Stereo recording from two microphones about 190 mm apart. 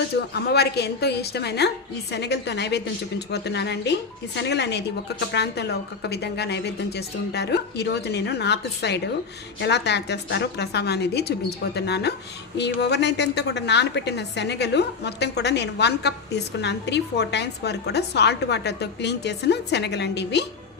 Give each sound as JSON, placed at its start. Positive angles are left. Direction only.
{"t": 0.4, "sound": "a woman's voice", "side_deg": 60}